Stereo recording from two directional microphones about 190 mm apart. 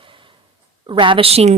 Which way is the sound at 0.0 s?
25° right (ahead or behind).